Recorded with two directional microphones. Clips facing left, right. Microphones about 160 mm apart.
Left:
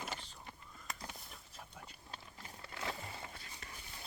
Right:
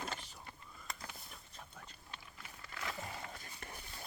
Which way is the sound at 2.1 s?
30° left (ahead or behind).